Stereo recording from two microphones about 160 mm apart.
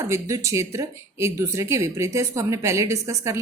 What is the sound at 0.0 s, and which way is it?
A woman's voice, 20° right (ahead or behind).